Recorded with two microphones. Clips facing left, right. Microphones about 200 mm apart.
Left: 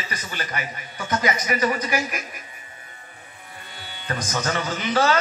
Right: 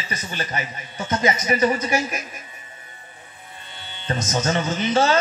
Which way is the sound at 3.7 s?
25° right (ahead or behind).